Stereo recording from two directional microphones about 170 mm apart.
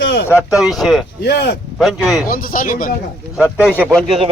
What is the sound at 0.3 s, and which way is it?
Speech, 5° right (ahead or behind).